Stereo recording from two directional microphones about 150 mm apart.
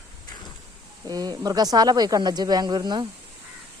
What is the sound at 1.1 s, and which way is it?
Speech, 25° right (ahead or behind).